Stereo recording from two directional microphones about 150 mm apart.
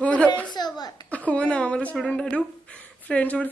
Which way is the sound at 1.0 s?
10° left (ahead or behind).